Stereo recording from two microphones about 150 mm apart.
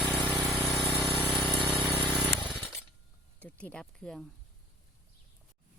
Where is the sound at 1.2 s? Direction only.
10° right (ahead or behind).